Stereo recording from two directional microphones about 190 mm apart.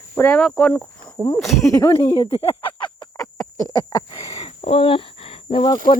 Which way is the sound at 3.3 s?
15° left (ahead or behind).